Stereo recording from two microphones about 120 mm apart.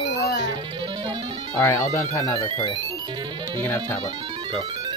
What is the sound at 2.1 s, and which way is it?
Speech, 25° left (ahead or behind).